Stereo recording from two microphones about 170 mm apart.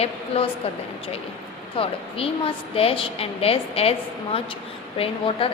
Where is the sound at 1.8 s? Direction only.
35° left (ahead or behind).